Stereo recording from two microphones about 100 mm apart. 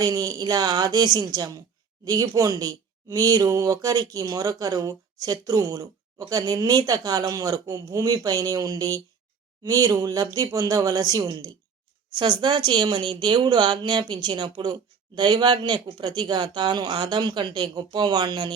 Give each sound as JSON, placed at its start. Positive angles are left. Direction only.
{"t": 0.0, "sound": "speech", "side_deg": -35}